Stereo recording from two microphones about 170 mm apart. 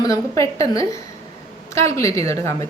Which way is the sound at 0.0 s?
20° left (ahead or behind).